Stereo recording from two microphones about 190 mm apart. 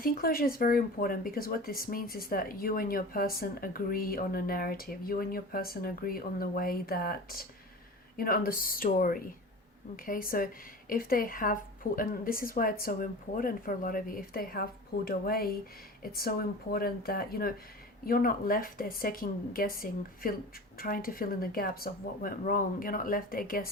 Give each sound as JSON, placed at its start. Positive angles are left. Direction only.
{"t": 0.0, "sound": "speech", "side_deg": 50}